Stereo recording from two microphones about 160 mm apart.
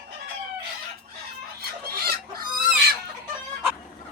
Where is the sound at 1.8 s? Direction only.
70° right (ahead or behind).